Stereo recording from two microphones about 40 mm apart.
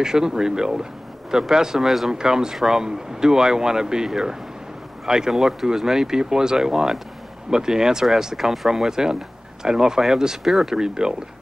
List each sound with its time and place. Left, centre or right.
0.0 s speech: centre